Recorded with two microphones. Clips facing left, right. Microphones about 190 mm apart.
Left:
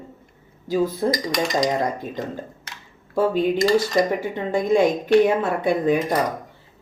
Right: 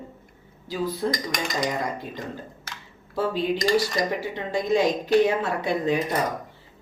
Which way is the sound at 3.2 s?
50° left (ahead or behind).